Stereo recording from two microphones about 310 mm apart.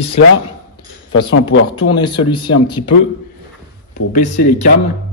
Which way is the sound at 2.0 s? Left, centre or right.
Centre.